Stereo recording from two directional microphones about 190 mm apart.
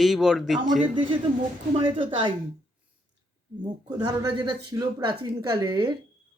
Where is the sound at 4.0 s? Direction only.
20° right (ahead or behind).